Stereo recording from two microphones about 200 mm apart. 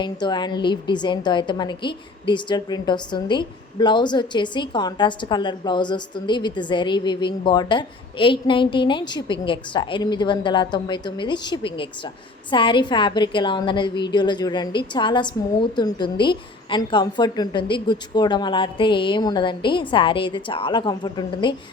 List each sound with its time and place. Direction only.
0.0 s a woman's voice: 20° left (ahead or behind)